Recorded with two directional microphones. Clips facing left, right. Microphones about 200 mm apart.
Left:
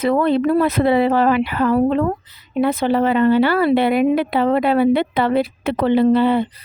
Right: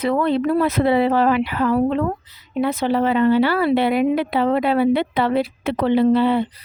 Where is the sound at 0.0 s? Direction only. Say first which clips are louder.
Left 3 dB; 50° left (ahead or behind).